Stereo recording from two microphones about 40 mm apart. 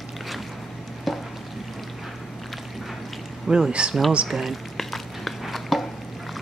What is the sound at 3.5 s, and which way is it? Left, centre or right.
Speech, right.